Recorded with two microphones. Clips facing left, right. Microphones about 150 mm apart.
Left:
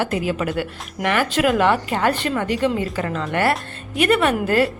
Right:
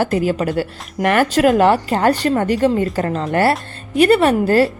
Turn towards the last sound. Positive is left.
turn(degrees=-35)  # may be behind; listen again after turning